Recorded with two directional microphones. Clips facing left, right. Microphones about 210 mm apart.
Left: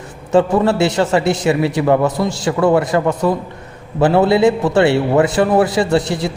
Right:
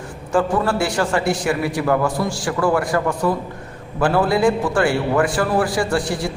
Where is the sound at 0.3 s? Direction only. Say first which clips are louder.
Left 5 dB; 25° left (ahead or behind).